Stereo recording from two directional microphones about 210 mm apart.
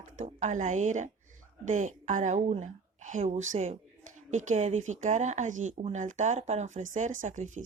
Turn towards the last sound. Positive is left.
turn(degrees=-35)  # may be behind; listen again after turning